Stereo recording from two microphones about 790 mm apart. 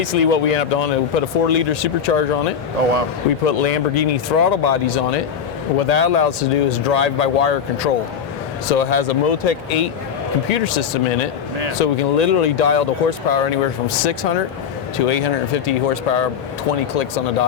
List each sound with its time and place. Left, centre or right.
0.0 s speech: left
3.4 s speech: left